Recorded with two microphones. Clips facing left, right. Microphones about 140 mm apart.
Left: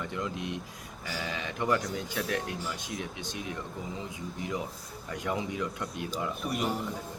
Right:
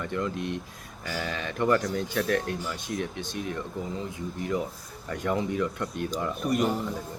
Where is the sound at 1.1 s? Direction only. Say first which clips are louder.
Right 4 dB; 15° left (ahead or behind).